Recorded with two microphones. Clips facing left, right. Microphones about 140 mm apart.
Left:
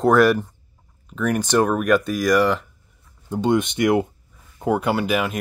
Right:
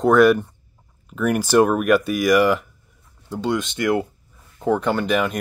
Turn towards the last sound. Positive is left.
turn(degrees=5)  # may be behind; listen again after turning